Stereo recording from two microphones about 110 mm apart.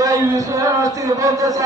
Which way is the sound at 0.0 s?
30° right (ahead or behind).